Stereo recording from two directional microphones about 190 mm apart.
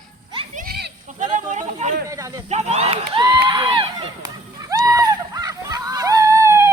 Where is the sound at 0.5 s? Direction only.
50° right (ahead or behind).